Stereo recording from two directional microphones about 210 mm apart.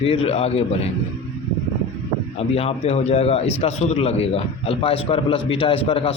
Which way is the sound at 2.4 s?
30° left (ahead or behind).